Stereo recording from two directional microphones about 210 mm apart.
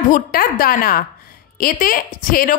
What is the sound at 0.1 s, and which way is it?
A woman's voice, 45° left (ahead or behind).